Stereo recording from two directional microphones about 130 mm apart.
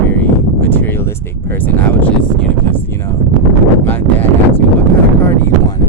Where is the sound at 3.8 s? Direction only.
15° left (ahead or behind).